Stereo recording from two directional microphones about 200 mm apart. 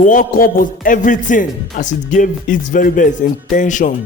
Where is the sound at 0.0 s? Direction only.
40° left (ahead or behind).